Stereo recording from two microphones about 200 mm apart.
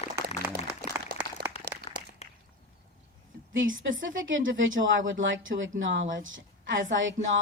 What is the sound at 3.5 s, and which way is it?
A woman's voice, 75° right (ahead or behind).